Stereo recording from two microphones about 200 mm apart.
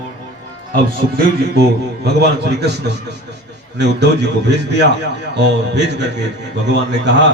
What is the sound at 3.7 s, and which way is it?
A man's voice, 60° right (ahead or behind).